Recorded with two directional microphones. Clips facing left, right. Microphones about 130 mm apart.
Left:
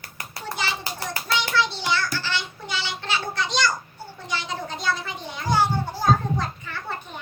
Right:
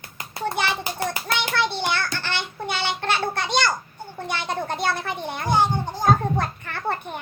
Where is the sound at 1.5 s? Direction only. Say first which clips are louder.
Even; 55° right (ahead or behind).